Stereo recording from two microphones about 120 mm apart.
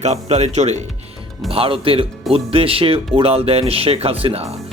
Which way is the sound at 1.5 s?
50° right (ahead or behind).